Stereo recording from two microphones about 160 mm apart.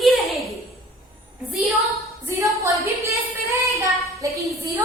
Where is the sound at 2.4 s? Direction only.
20° right (ahead or behind).